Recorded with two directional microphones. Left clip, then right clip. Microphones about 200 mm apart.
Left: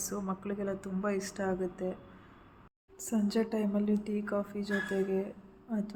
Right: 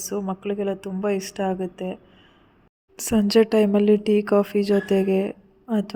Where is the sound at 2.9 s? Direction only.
50° right (ahead or behind).